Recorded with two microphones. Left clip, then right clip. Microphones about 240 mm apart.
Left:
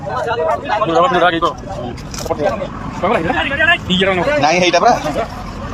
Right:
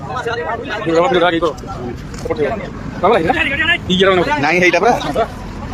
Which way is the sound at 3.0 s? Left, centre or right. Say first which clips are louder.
Right 3 dB; right.